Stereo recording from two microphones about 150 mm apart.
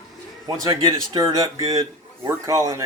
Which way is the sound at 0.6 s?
25° right (ahead or behind).